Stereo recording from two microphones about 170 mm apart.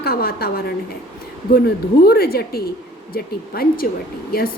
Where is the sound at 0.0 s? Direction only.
65° left (ahead or behind).